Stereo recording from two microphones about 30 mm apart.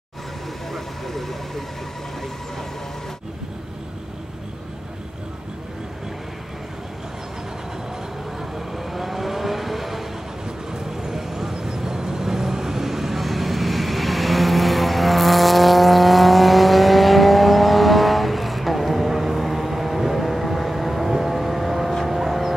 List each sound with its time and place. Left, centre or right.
0.7 s speech: centre
8.5 s vehicle: centre
10.7 s vehicle: centre